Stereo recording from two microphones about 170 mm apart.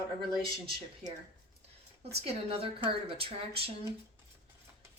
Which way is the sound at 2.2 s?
35° right (ahead or behind).